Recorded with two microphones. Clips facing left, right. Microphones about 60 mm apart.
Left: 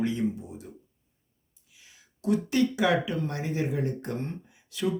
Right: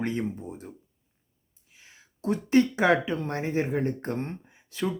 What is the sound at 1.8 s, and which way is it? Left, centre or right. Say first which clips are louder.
Speech: right 3 dB; right.